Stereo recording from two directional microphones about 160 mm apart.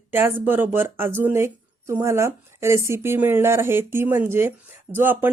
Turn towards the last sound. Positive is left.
turn(degrees=-10)  # may be behind; listen again after turning